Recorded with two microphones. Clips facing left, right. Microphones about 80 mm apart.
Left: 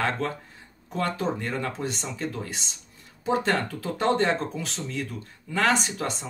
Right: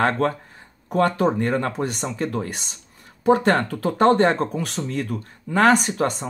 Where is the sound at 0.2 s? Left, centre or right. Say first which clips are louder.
Right 8 dB; right.